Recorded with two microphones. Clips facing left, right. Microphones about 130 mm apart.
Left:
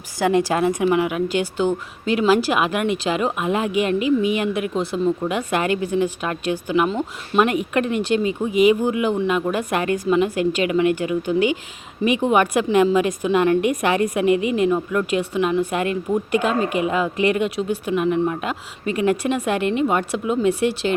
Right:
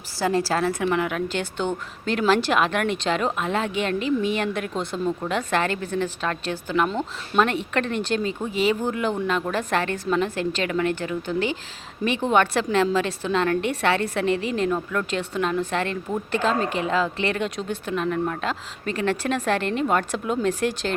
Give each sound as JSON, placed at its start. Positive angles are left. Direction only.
{"t": 0.2, "sound": "a woman's voice", "side_deg": 20}